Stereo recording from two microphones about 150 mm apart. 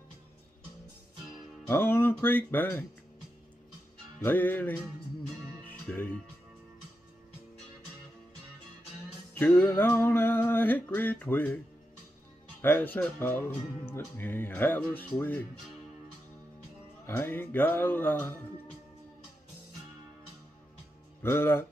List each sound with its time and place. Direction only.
1.7 s music: 15° left (ahead or behind)
4.2 s music: 10° left (ahead or behind)
9.3 s music: 10° left (ahead or behind)
12.6 s music: 10° left (ahead or behind)
17.0 s music: 15° left (ahead or behind)
21.2 s music: 15° left (ahead or behind)